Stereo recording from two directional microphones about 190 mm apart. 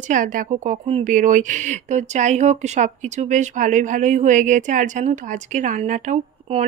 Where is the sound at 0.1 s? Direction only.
45° right (ahead or behind).